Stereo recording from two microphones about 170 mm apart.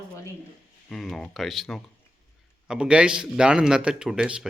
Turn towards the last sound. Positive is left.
turn(degrees=-5)  # may be behind; listen again after turning